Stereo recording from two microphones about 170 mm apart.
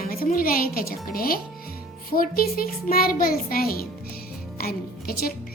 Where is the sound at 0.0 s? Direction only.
60° left (ahead or behind).